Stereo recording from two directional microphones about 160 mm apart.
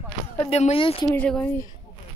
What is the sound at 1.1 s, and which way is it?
Speech, 5° left (ahead or behind).